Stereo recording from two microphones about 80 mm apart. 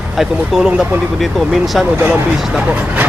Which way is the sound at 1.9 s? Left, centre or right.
Right.